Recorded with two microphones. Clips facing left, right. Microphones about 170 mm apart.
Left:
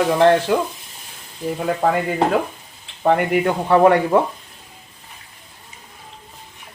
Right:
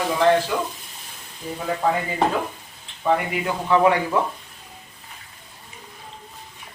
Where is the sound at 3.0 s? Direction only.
60° left (ahead or behind).